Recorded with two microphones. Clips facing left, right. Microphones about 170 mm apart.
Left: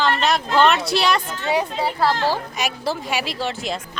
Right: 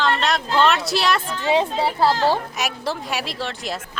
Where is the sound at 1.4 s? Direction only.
25° right (ahead or behind).